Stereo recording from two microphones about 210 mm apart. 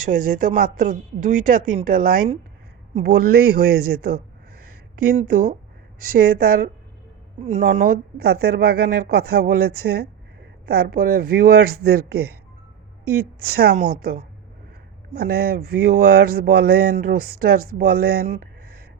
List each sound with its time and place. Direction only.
0.0 s a woman's voice: 40° right (ahead or behind)
5.2 s speech: 40° right (ahead or behind)
13.7 s speech: 45° right (ahead or behind)